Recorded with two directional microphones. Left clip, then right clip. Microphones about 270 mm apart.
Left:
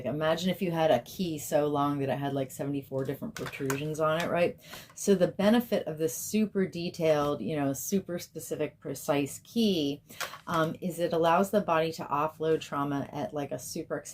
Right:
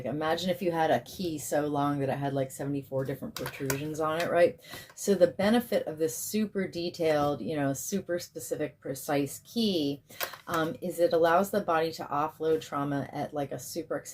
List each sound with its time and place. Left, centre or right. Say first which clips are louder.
0.0 s speech: left 1 dB; left